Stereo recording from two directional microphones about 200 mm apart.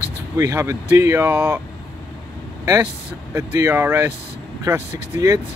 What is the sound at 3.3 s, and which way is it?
Speech, 15° right (ahead or behind).